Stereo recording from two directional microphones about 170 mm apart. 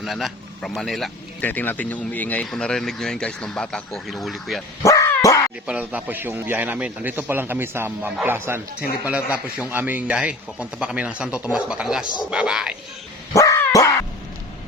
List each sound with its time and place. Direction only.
0.0 s speech: centre (ahead or behind)
4.8 s dog: 20° left (ahead or behind)
5.6 s a man's voice: 10° right (ahead or behind)
13.3 s dog: 20° left (ahead or behind)